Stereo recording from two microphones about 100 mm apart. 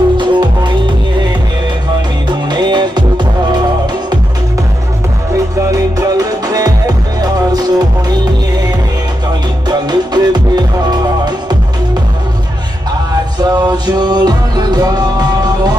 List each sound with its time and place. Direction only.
0.2 s music: 50° right (ahead or behind)
2.2 s music: 45° right (ahead or behind)
5.7 s music: 35° right (ahead or behind)
9.7 s music: 45° right (ahead or behind)
13.4 s music: 45° right (ahead or behind)